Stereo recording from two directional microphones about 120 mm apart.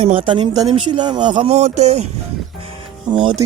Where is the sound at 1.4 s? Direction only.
65° right (ahead or behind).